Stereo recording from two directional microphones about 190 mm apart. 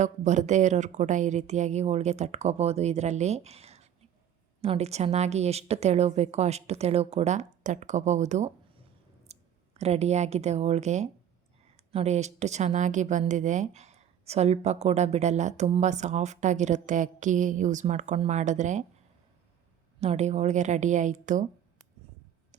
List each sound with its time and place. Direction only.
0.0 s speech: 40° right (ahead or behind)
20.0 s speech: 35° right (ahead or behind)